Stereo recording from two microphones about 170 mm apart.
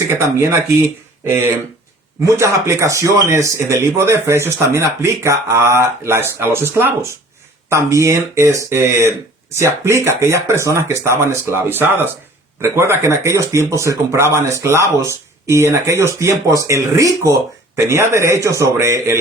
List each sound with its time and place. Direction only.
0.1 s speech: 15° right (ahead or behind)
2.2 s speech: 15° right (ahead or behind)